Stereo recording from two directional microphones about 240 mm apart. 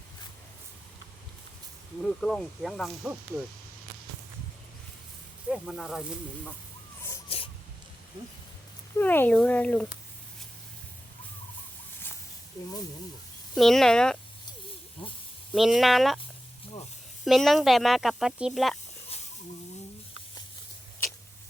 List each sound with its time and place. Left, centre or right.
2.0 s speech: centre
5.5 s speech: centre
7.3 s a sound: left
9.0 s speech: centre
13.6 s speech: centre
15.0 s speech: left
15.5 s speech: centre
17.2 s speech: centre